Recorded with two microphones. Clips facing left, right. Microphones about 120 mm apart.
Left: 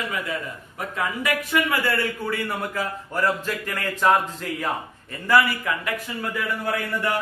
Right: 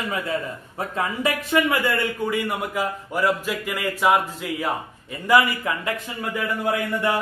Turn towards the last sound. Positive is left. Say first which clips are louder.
# right 3 dB
turn(degrees=-20)  # may be behind; listen again after turning